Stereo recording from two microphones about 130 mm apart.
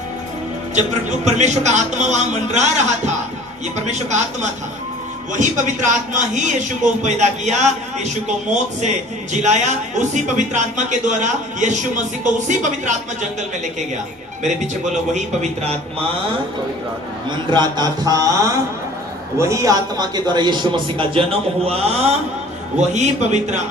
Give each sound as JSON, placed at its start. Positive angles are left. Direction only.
{"t": 0.8, "sound": "speech", "side_deg": -65}
{"t": 3.8, "sound": "speech", "side_deg": -60}
{"t": 5.3, "sound": "a man's voice", "side_deg": -70}
{"t": 14.4, "sound": "speech", "side_deg": -65}
{"t": 17.2, "sound": "a man's voice", "side_deg": -35}
{"t": 22.9, "sound": "speech", "side_deg": -65}